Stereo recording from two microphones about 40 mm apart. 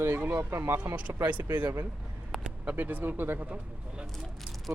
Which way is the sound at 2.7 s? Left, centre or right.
Right.